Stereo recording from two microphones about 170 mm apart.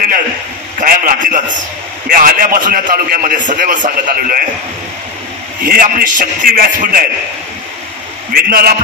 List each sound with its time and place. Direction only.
0.7 s a man's voice: 50° right (ahead or behind)
5.7 s a man's voice: 55° right (ahead or behind)
8.3 s a man's voice: 55° right (ahead or behind)